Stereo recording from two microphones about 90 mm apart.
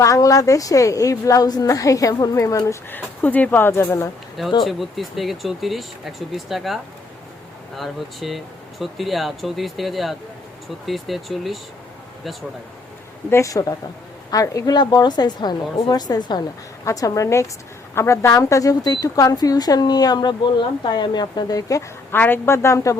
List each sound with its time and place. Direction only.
0.0 s a woman's voice: 35° left (ahead or behind)
2.9 s speech: 20° left (ahead or behind)
4.6 s speech: centre (ahead or behind)
7.8 s speech: centre (ahead or behind)
13.3 s a woman's voice: 40° left (ahead or behind)
16.8 s a woman's voice: 40° left (ahead or behind)
22.1 s speech: 25° left (ahead or behind)